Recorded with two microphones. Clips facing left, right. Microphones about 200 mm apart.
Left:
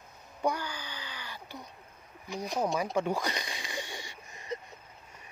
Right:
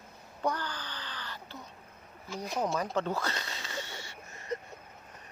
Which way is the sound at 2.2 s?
15° left (ahead or behind).